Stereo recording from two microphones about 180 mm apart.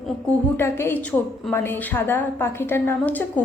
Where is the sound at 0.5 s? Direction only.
15° left (ahead or behind).